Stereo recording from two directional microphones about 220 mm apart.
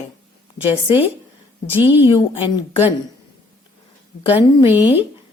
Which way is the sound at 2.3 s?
25° left (ahead or behind).